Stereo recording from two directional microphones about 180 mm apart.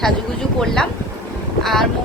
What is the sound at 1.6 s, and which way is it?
Speech, centre (ahead or behind).